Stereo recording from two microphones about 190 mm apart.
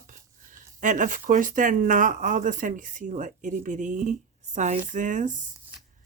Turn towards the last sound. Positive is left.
turn(degrees=-40)  # may be behind; listen again after turning